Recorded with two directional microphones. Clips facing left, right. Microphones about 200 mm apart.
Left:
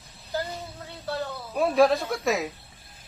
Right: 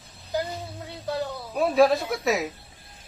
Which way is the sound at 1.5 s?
Centre (ahead or behind).